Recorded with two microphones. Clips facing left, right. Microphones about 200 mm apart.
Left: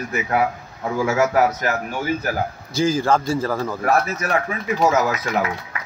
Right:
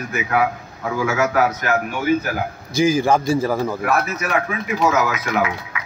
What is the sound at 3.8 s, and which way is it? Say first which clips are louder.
Speech: left 1 dB; 30° left (ahead or behind).